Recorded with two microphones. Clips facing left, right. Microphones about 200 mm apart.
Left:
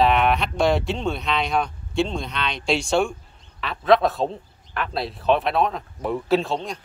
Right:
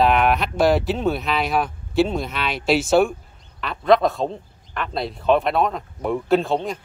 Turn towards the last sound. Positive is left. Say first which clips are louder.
# right 2 dB
turn(degrees=0)  # may be behind; listen again after turning